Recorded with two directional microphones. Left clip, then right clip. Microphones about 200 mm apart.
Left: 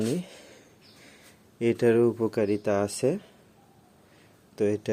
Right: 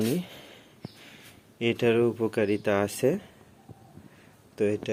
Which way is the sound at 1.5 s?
15° left (ahead or behind).